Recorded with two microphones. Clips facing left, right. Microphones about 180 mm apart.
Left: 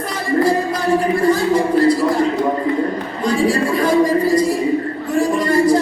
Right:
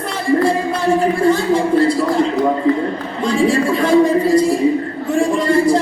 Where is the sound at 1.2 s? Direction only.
25° right (ahead or behind).